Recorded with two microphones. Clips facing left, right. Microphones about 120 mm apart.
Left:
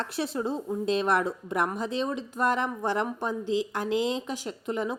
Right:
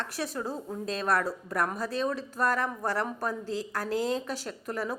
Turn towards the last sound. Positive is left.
turn(degrees=20)  # may be behind; listen again after turning